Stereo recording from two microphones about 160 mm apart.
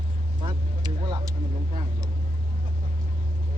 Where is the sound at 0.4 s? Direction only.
30° right (ahead or behind).